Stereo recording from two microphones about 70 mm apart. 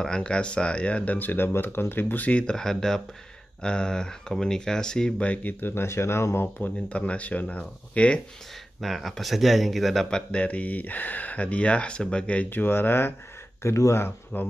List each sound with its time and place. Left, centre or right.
0.0 s speech: centre
2.4 s speech: centre
5.3 s speech: left
6.4 s speech: left
8.8 s speech: centre
10.0 s speech: centre
12.4 s speech: left
13.6 s speech: left
14.3 s speech: left